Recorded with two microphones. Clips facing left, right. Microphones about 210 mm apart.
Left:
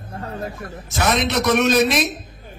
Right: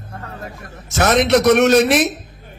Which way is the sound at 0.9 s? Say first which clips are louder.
Right 6 dB; 80° right.